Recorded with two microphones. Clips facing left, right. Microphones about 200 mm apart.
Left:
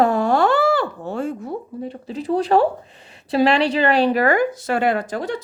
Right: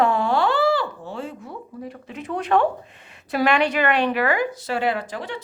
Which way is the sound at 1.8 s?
30° left (ahead or behind).